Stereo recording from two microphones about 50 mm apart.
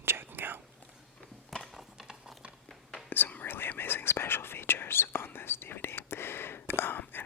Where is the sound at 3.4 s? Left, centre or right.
Left.